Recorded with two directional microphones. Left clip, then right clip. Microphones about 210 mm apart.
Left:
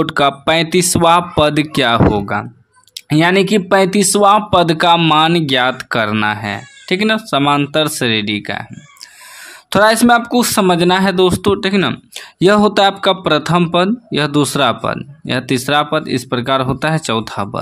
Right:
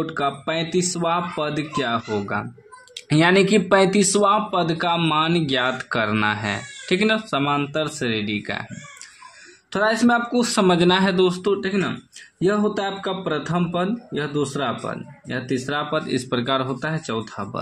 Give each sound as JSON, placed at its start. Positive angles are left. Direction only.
{"t": 0.0, "sound": "speech", "side_deg": 40}
{"t": 9.7, "sound": "speech", "side_deg": 40}